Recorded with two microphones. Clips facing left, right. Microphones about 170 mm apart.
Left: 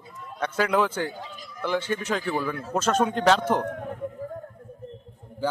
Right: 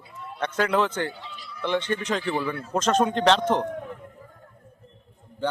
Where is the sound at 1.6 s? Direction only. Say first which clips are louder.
Right 1 dB; 5° left (ahead or behind).